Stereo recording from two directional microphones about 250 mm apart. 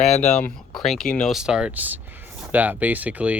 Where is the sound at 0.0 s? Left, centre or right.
Left.